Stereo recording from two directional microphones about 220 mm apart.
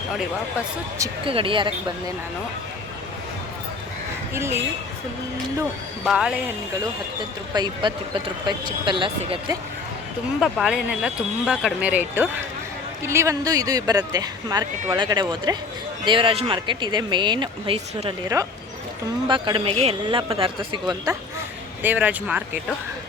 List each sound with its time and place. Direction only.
0.9 s speech: 20° right (ahead or behind)
6.1 s speech: 5° right (ahead or behind)
7.5 s speech: 20° right (ahead or behind)
10.4 s speech: 5° right (ahead or behind); by 21.2 s 20° right (ahead or behind)
21.8 s speech: 10° right (ahead or behind)